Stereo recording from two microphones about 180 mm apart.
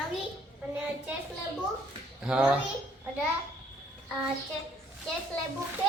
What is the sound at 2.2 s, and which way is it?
Speech, 5° right (ahead or behind).